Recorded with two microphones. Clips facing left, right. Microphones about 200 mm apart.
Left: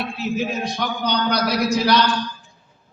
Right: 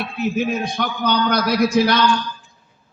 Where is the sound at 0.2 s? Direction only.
55° right (ahead or behind).